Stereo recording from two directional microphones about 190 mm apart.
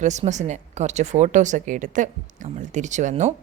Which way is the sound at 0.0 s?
40° right (ahead or behind).